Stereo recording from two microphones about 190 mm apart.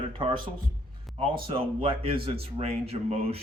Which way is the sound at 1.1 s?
Centre (ahead or behind).